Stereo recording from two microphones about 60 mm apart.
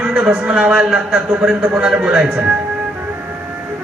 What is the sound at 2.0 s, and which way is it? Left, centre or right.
Speech, centre.